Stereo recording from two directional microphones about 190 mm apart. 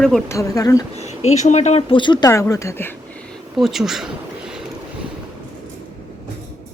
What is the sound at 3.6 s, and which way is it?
Speech, centre (ahead or behind).